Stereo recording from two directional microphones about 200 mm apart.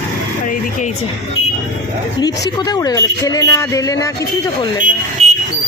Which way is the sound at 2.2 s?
20° left (ahead or behind).